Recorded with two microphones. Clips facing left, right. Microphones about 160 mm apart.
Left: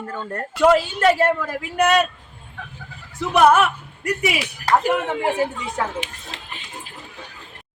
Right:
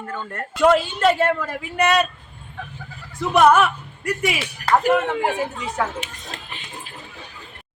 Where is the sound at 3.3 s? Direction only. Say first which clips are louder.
Even; 5° left (ahead or behind).